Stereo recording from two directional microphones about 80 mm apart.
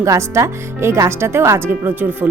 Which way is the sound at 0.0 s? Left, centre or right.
Right.